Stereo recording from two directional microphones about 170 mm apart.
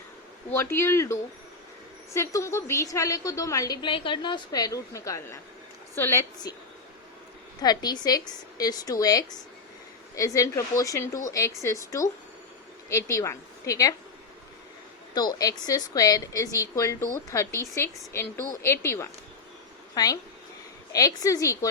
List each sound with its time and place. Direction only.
0.5 s a woman's voice: 15° left (ahead or behind)
7.6 s a woman's voice: 25° left (ahead or behind)
15.1 s a woman's voice: 25° left (ahead or behind)